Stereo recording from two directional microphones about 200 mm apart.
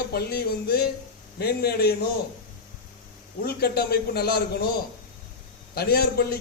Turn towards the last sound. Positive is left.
turn(degrees=50)  # may be behind; listen again after turning